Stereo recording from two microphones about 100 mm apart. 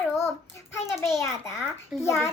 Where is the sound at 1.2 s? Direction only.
30° left (ahead or behind).